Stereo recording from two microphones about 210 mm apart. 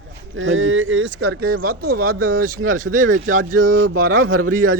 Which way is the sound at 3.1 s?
90° right.